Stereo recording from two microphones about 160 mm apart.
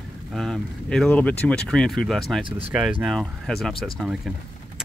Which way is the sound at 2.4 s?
35° right (ahead or behind).